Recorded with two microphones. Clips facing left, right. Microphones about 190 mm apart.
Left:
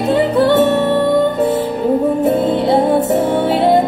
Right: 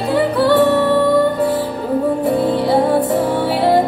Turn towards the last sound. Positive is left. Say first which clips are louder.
# left 2 dB
turn(degrees=25)  # may be behind; listen again after turning